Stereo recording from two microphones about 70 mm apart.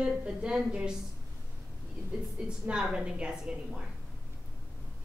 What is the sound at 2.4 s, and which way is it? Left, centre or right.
A woman's voice, centre.